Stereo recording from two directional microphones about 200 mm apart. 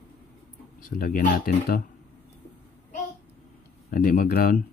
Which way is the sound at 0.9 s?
45° left (ahead or behind).